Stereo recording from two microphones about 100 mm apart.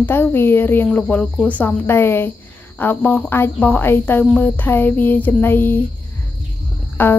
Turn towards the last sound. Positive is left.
turn(degrees=20)  # may be behind; listen again after turning